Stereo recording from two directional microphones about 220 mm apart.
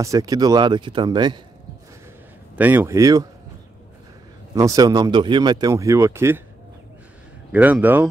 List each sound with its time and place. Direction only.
0.0 s speech: 15° right (ahead or behind)
2.5 s speech: 10° right (ahead or behind)
4.6 s speech: 15° right (ahead or behind)
7.5 s speech: 5° right (ahead or behind)